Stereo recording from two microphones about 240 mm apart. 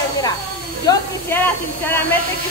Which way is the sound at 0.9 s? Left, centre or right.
Centre.